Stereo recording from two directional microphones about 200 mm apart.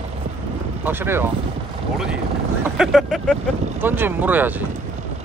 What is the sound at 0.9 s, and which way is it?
Speech, 10° right (ahead or behind).